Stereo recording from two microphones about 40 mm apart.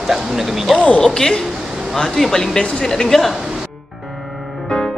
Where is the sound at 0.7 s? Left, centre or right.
Left; by 3.3 s centre.